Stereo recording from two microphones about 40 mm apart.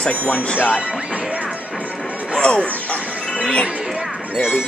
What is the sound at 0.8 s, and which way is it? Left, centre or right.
Speech, right.